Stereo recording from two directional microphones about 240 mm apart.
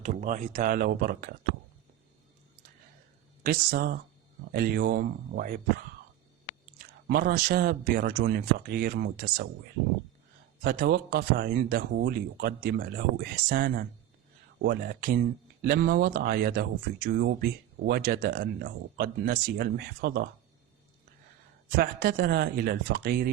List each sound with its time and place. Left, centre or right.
0.0 s speech: right
3.4 s speech: right
7.1 s speech: right
10.6 s speech: right
21.8 s speech: right